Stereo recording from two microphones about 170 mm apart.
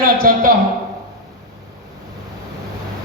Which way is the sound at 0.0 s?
60° right (ahead or behind).